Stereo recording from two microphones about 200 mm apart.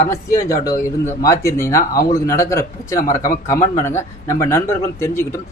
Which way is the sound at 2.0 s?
45° left (ahead or behind).